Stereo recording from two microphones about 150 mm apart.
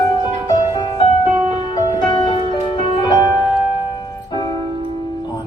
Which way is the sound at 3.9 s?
25° left (ahead or behind).